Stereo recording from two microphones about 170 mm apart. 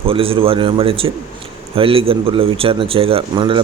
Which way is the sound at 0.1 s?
35° right (ahead or behind).